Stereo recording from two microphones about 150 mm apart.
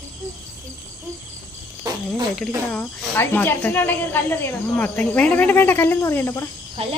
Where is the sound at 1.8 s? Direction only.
25° right (ahead or behind).